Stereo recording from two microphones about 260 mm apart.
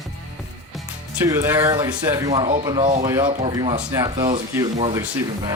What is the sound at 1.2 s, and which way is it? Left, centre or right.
Speech, centre.